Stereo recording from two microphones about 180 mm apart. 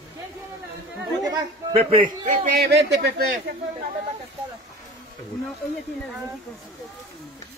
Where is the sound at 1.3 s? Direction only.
30° right (ahead or behind).